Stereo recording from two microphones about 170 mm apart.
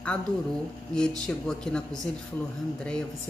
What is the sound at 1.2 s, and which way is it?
Speech, 5° left (ahead or behind).